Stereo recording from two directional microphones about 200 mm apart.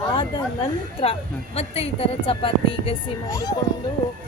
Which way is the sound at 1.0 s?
30° left (ahead or behind).